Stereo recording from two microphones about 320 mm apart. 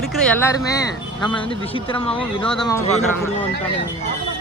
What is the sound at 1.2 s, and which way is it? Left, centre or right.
Speech, centre.